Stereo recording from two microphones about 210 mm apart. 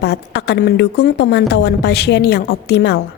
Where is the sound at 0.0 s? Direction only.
50° left (ahead or behind).